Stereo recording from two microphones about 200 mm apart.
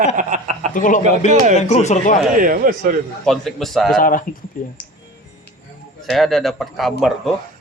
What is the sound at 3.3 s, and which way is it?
Speech, centre (ahead or behind).